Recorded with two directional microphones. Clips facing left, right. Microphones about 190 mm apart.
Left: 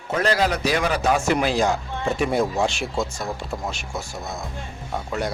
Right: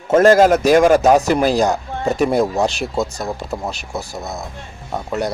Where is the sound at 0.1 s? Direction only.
45° right (ahead or behind).